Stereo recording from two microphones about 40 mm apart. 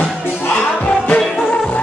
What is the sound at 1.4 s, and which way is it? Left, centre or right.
Music, centre.